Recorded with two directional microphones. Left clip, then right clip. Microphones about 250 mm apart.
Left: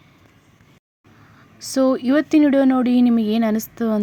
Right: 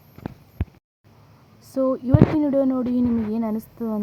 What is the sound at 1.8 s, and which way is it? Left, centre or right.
Speech, left.